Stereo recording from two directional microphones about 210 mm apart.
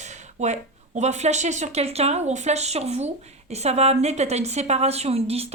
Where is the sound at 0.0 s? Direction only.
35° right (ahead or behind).